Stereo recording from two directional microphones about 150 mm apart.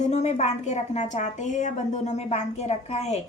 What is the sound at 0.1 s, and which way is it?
A woman's voice, 45° left (ahead or behind).